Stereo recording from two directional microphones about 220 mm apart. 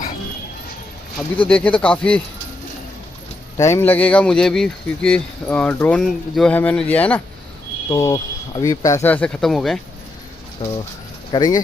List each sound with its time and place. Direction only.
1.4 s speech: 5° left (ahead or behind)
3.6 s speech: 10° left (ahead or behind)
10.6 s speech: 20° left (ahead or behind)